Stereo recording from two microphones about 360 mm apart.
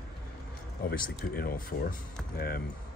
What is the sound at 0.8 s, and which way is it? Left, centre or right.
Speech, left.